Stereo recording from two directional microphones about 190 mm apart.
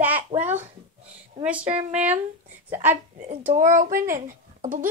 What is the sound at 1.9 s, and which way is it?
Speech, 10° right (ahead or behind).